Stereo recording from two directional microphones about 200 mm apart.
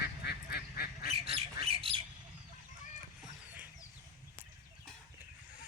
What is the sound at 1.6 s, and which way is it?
Squawk, 30° right (ahead or behind).